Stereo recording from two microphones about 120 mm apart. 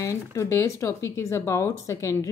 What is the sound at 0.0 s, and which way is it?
Speech, 25° left (ahead or behind).